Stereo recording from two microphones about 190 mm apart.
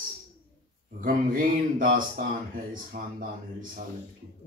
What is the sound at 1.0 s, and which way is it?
Speech, 45° right (ahead or behind).